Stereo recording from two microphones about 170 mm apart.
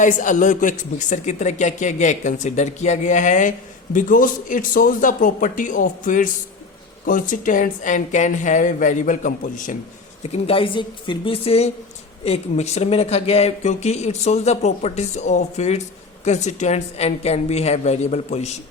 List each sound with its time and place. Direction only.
0.0 s speech: 50° left (ahead or behind)
10.3 s speech: 35° left (ahead or behind)